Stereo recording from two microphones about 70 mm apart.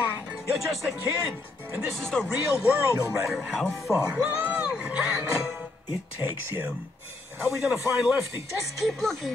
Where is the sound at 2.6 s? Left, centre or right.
Right.